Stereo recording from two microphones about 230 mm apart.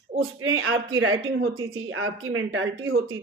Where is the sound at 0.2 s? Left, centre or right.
Right.